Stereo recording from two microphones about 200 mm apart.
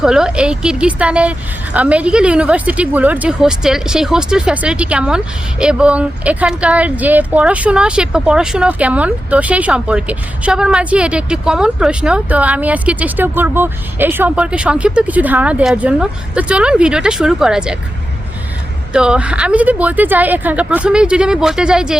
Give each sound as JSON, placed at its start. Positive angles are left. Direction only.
{"t": 0.0, "sound": "a woman's voice", "side_deg": -5}
{"t": 18.9, "sound": "a woman's voice", "side_deg": -5}